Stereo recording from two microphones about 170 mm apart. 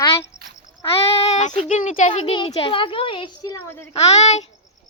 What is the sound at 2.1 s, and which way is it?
A child's voice, 35° left (ahead or behind).